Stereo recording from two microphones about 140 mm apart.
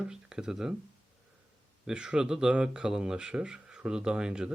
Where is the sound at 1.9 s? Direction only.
5° right (ahead or behind).